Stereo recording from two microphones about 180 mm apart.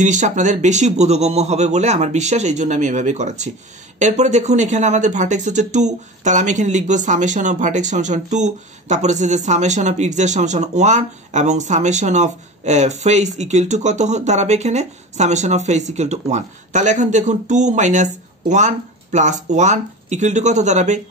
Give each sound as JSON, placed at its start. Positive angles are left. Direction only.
{"t": 0.0, "sound": "speech", "side_deg": -40}